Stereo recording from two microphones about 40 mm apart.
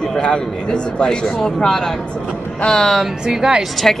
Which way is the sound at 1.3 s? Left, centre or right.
Centre.